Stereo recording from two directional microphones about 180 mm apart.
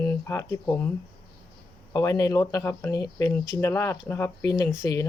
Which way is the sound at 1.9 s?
20° left (ahead or behind).